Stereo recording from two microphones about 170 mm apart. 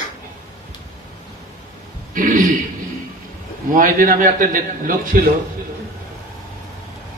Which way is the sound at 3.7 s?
55° right (ahead or behind).